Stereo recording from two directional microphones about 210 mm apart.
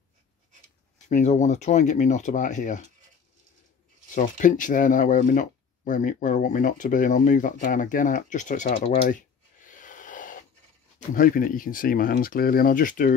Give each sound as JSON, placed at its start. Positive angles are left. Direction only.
{"t": 1.0, "sound": "speech", "side_deg": 35}
{"t": 4.1, "sound": "speech", "side_deg": 40}
{"t": 9.7, "sound": "a sound", "side_deg": 40}
{"t": 11.1, "sound": "speech", "side_deg": 40}